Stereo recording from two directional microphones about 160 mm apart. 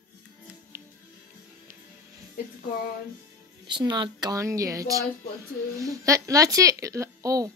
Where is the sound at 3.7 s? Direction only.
30° right (ahead or behind).